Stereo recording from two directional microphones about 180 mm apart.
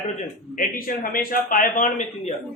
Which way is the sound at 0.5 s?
50° left (ahead or behind).